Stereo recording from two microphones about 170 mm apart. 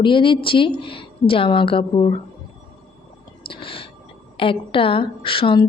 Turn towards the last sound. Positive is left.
turn(degrees=30)  # may be behind; listen again after turning